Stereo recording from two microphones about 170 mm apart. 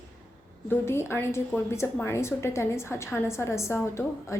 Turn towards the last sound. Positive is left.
turn(degrees=15)  # may be behind; listen again after turning